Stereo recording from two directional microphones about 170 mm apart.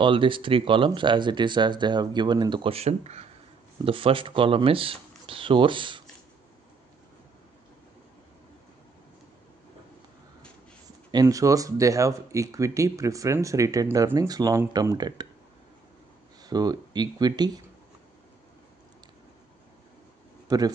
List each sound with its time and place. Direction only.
0.0 s speech: 30° right (ahead or behind)
11.1 s speech: 20° right (ahead or behind)
16.4 s speech: 25° right (ahead or behind)
20.4 s speech: 20° right (ahead or behind)